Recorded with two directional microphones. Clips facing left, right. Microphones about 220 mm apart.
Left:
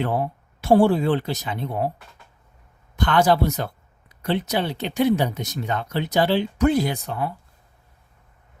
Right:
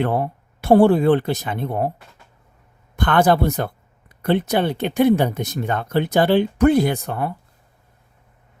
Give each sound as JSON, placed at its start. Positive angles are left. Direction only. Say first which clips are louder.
{"t": 0.0, "sound": "speech", "louder": "right 3 dB", "side_deg": -60}
{"t": 2.9, "sound": "speech", "louder": "right 2 dB", "side_deg": -55}